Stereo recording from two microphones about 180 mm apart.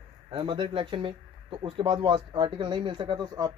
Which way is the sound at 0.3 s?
30° right (ahead or behind).